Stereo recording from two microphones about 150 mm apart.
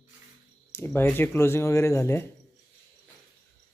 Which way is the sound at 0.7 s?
15° left (ahead or behind).